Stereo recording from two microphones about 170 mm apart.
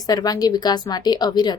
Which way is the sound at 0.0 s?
20° left (ahead or behind).